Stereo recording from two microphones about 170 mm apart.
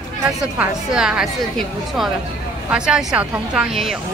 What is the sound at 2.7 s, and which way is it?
Speech, 5° right (ahead or behind).